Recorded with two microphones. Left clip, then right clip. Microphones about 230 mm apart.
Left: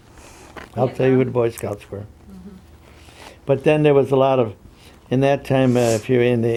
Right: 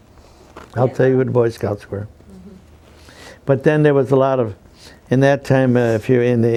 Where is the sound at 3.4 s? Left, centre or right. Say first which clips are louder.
Right 1 dB; right.